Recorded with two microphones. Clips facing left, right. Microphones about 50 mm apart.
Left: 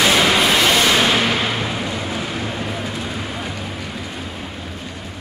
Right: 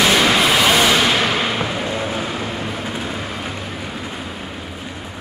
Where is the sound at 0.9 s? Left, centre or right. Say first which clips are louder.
Even; centre.